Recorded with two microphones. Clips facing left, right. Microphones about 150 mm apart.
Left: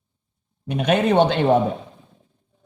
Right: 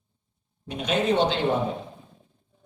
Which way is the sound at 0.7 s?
60° left (ahead or behind).